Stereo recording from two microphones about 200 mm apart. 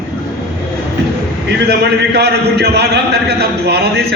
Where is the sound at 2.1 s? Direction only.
55° right (ahead or behind).